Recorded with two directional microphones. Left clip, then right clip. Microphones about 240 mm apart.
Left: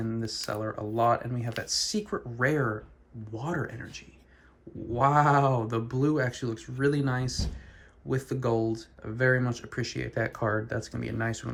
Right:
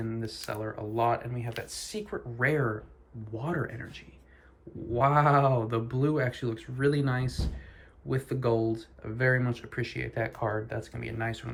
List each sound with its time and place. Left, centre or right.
0.0 s speech: centre